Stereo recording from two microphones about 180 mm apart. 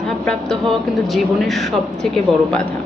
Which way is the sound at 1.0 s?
Centre (ahead or behind).